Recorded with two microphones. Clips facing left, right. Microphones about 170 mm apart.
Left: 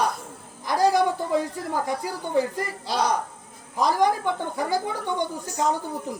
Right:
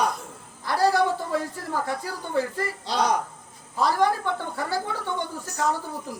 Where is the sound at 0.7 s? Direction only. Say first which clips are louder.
Left 1 dB; 15° left (ahead or behind).